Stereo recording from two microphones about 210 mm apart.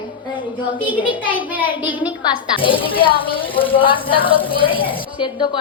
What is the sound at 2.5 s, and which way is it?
A woman's voice, 25° left (ahead or behind).